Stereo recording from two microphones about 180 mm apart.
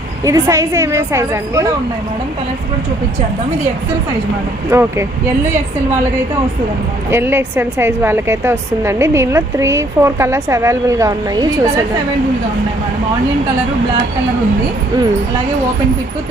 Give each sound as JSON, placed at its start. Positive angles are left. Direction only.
{"t": 0.3, "sound": "a woman's voice", "side_deg": -15}
{"t": 4.7, "sound": "a woman's voice", "side_deg": -15}
{"t": 7.1, "sound": "a woman's voice", "side_deg": -10}